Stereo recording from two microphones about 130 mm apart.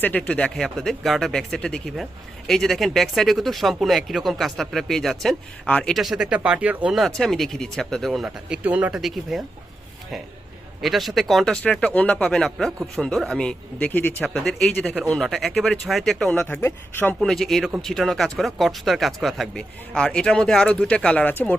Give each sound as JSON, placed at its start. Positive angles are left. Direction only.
{"t": 0.0, "sound": "speech", "side_deg": 10}
{"t": 10.8, "sound": "speech", "side_deg": 0}
{"t": 16.4, "sound": "speech", "side_deg": 20}
{"t": 17.2, "sound": "speech", "side_deg": 0}